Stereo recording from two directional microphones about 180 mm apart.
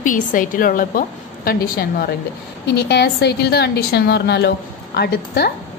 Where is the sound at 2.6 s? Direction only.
70° left (ahead or behind).